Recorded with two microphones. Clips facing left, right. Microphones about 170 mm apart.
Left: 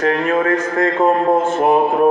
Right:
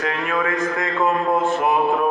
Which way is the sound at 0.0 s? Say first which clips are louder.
Left 7 dB; 45° left (ahead or behind).